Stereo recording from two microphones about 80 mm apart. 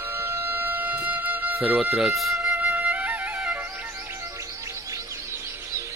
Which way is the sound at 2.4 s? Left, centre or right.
Right.